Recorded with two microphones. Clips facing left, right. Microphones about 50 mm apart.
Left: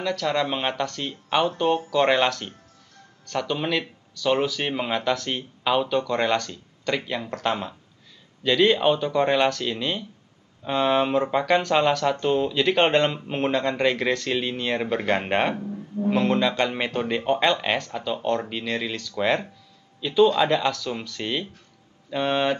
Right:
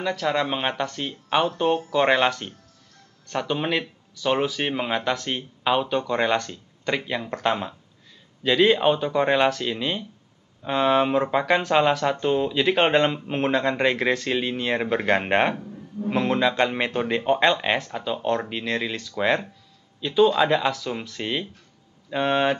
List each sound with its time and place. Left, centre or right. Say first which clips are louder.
0.0 s a man's voice: even; centre
13.5 s a man's voice: right 1 dB; centre